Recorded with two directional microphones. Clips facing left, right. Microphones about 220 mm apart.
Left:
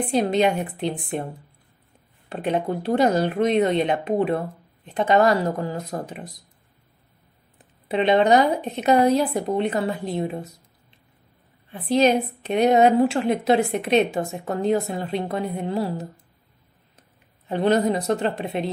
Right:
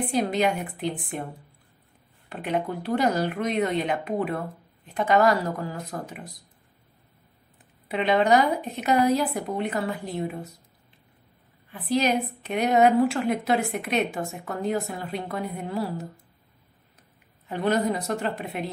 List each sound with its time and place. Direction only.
0.1 s a woman's voice: 25° left (ahead or behind)
2.8 s a woman's voice: 25° left (ahead or behind)
7.9 s a woman's voice: 25° left (ahead or behind)
11.9 s a woman's voice: 25° left (ahead or behind)
17.5 s a woman's voice: 25° left (ahead or behind)